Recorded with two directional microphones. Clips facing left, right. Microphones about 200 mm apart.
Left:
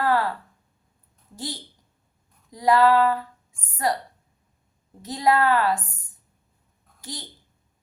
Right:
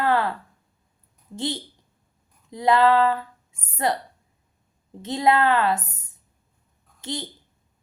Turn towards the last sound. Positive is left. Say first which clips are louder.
# right 7 dB
turn(degrees=-25)  # may be behind; listen again after turning